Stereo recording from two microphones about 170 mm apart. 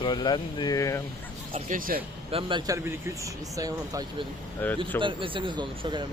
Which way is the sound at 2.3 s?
30° right (ahead or behind).